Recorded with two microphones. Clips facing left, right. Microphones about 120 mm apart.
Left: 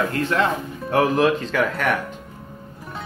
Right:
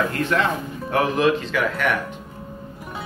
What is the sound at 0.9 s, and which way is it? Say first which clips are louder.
Speech: left 1 dB; 40° left (ahead or behind).